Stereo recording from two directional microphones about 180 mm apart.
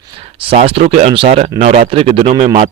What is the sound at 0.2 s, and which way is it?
A man's voice, 30° right (ahead or behind).